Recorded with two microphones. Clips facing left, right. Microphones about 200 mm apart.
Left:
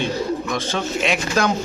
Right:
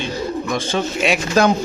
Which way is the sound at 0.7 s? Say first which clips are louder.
Right 3 dB; 10° right (ahead or behind).